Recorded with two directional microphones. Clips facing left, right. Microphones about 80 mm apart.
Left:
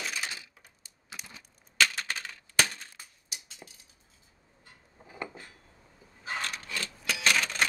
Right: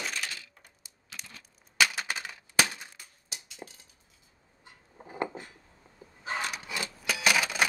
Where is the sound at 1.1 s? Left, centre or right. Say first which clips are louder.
Left 1 dB; left.